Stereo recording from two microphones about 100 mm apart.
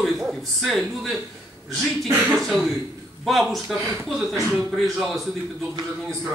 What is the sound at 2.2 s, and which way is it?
A man's voice, centre (ahead or behind).